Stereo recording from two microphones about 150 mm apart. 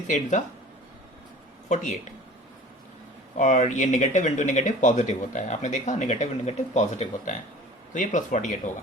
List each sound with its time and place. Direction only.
0.1 s speech: 55° left (ahead or behind)
1.7 s speech: 55° left (ahead or behind)
3.3 s speech: 55° left (ahead or behind)